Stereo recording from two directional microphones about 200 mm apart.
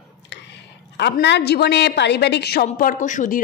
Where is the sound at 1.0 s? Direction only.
60° left (ahead or behind).